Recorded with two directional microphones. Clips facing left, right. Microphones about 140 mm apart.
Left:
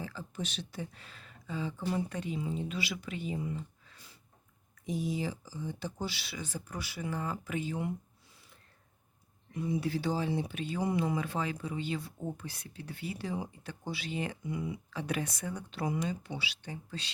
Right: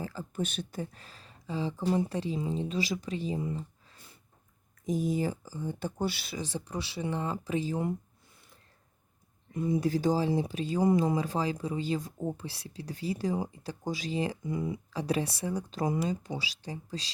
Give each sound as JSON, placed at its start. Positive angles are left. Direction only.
{"t": 0.0, "sound": "speech", "side_deg": -40}
{"t": 4.9, "sound": "speech", "side_deg": -45}
{"t": 6.3, "sound": "speech", "side_deg": -30}
{"t": 9.6, "sound": "speech", "side_deg": -50}